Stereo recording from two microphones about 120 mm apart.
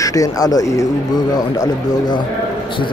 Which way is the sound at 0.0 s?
30° left (ahead or behind).